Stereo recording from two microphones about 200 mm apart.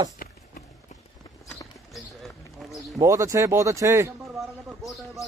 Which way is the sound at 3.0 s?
15° right (ahead or behind).